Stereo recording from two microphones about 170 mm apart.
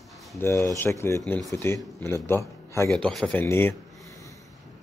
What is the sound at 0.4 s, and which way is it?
Speech, 15° left (ahead or behind).